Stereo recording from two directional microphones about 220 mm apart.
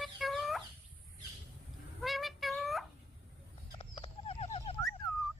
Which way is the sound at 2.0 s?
Centre (ahead or behind).